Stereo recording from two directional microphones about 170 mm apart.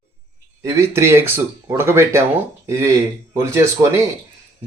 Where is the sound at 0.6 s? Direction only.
15° right (ahead or behind).